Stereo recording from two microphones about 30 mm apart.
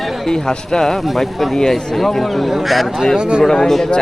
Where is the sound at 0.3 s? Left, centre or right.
Centre.